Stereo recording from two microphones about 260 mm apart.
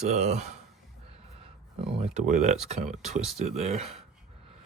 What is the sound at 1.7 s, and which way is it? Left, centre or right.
Speech, right.